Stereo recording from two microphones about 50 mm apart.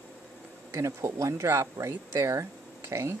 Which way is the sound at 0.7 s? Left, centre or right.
Right.